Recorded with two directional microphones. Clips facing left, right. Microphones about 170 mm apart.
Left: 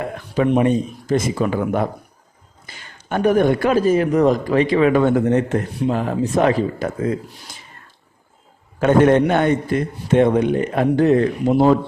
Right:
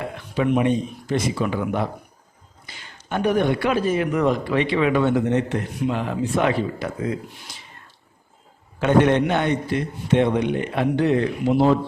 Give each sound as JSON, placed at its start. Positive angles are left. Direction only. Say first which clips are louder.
{"t": 0.3, "sound": "a man's voice", "louder": "left 3 dB", "side_deg": 40}
{"t": 8.8, "sound": "a man's voice", "louder": "left 4 dB", "side_deg": 45}